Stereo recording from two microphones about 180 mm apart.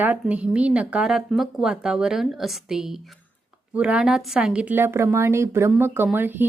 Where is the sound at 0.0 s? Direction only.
10° right (ahead or behind).